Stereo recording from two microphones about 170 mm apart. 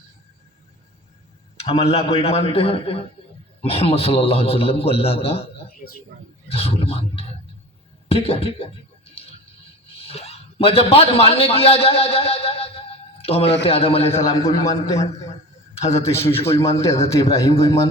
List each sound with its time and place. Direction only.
1.8 s a man's voice: 35° left (ahead or behind)
6.5 s a man's voice: 35° left (ahead or behind)
9.8 s a man's voice: 35° left (ahead or behind)
14.3 s a man's voice: 20° left (ahead or behind)
15.8 s a man's voice: 40° left (ahead or behind)
16.6 s a man's voice: 15° left (ahead or behind)